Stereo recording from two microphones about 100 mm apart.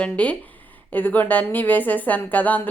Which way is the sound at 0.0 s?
15° left (ahead or behind).